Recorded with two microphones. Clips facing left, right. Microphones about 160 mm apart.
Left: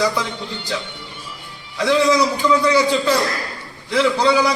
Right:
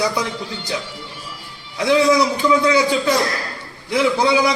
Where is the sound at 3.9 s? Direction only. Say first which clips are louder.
Even; 15° right (ahead or behind).